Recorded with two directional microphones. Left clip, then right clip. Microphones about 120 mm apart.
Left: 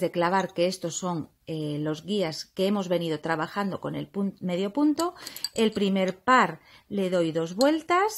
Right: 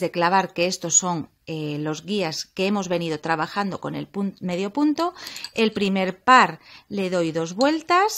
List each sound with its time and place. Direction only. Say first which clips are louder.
0.0 s speech: right 5 dB; 30° right (ahead or behind)